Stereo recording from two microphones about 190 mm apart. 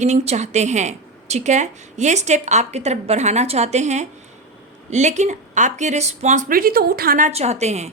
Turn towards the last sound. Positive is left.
turn(degrees=-35)  # may be behind; listen again after turning